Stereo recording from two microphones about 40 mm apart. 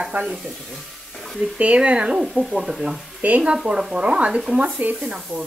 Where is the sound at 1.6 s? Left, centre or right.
Right.